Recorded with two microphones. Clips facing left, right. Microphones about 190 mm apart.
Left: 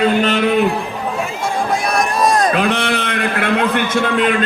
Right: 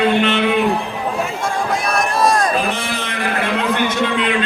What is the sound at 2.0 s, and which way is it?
Run, 20° left (ahead or behind).